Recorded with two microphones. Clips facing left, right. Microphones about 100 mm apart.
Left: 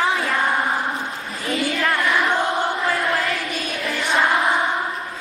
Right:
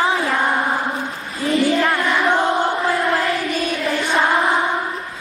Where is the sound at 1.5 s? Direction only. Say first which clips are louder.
Right 6 dB; 30° right (ahead or behind).